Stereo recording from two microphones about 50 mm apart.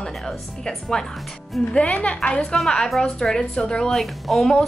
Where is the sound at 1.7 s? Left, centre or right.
Left.